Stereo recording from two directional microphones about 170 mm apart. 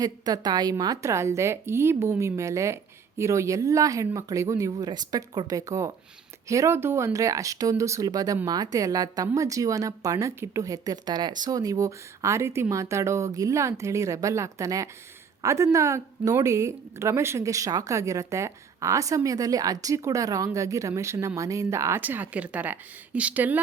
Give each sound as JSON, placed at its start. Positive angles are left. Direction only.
{"t": 0.0, "sound": "a woman's voice", "side_deg": -25}